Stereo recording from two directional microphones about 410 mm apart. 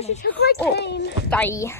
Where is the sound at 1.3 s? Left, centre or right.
Centre.